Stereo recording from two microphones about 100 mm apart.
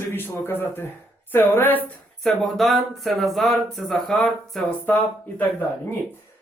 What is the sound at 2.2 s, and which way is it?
Speech, centre (ahead or behind).